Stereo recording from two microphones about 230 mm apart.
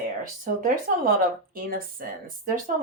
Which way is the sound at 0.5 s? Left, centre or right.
Right.